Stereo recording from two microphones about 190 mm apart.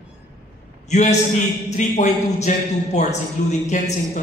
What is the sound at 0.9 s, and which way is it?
A man's voice, 35° left (ahead or behind).